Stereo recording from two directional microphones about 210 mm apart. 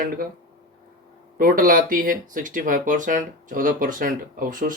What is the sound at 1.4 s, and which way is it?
Speech, 40° right (ahead or behind).